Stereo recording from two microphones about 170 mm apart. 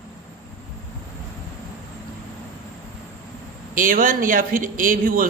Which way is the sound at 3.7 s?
50° right (ahead or behind).